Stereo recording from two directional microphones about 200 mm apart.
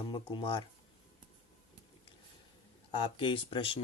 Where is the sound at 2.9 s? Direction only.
25° left (ahead or behind).